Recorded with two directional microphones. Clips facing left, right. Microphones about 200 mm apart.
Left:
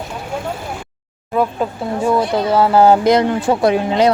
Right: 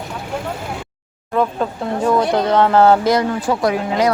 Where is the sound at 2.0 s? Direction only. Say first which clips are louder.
Even; 5° left (ahead or behind).